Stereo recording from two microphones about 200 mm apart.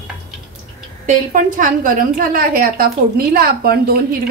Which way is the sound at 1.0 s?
40° right (ahead or behind).